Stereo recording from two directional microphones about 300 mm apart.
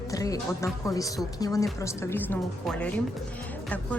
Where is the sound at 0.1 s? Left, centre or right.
Centre.